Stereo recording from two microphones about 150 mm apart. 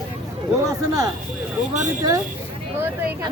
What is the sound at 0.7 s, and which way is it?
Speech, 25° right (ahead or behind).